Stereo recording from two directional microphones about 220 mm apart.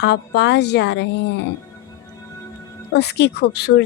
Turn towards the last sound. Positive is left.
turn(degrees=50)  # may be behind; listen again after turning